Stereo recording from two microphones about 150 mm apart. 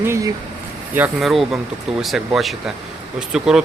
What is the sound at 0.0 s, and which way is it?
Speech, 15° right (ahead or behind).